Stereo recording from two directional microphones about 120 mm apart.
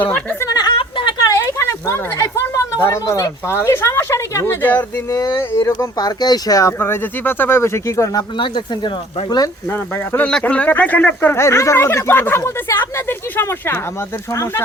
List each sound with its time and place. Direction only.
0.0 s speech: 15° left (ahead or behind)
0.4 s a sound: 35° left (ahead or behind)
1.2 s speech: 25° left (ahead or behind)
5.1 s speech: 30° left (ahead or behind)
8.4 s speech: 40° left (ahead or behind)
10.2 s speech: 10° left (ahead or behind)